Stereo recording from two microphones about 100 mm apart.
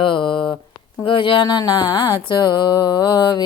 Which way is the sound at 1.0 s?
60° left (ahead or behind).